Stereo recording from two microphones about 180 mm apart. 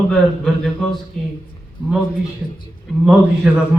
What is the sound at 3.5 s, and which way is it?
Speech, 10° right (ahead or behind).